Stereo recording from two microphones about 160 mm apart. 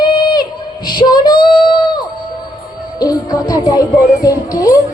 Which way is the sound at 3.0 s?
25° left (ahead or behind).